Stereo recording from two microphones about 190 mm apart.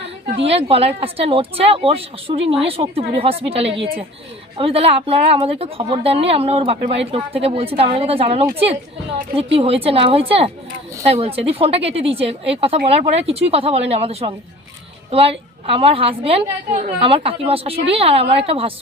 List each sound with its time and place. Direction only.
0.3 s speech: 30° right (ahead or behind)